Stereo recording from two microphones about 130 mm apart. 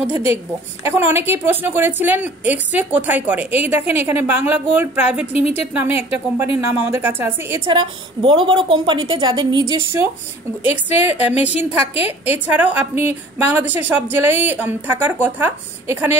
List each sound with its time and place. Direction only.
0.8 s a woman's voice: 15° right (ahead or behind)
5.3 s a woman's voice: 50° left (ahead or behind)
5.7 s a woman's voice: 15° right (ahead or behind)
7.6 s a woman's voice: 40° right (ahead or behind); by 16.1 s 15° right (ahead or behind)